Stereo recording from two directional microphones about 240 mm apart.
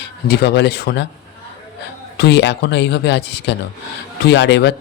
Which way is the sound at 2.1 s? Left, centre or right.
Left.